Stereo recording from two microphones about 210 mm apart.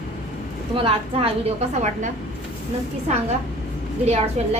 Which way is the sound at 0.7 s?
25° right (ahead or behind).